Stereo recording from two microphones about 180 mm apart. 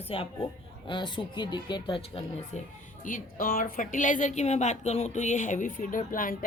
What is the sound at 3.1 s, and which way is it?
A woman's voice, 50° left (ahead or behind).